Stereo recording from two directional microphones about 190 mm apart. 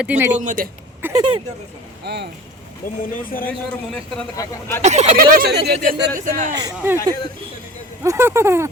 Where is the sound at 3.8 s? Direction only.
Centre (ahead or behind).